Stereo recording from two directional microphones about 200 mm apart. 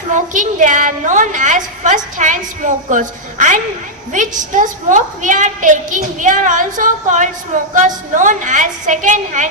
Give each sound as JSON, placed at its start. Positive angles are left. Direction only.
{"t": 0.1, "sound": "a woman's voice", "side_deg": -40}